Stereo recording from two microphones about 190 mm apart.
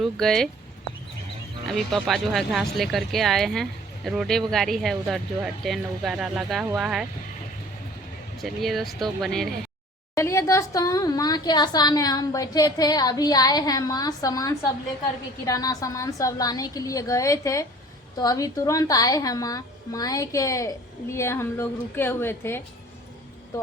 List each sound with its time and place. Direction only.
0.0 s speech: centre (ahead or behind)
1.6 s speech: centre (ahead or behind)
8.4 s speech: centre (ahead or behind)
10.2 s a woman's voice: 15° left (ahead or behind)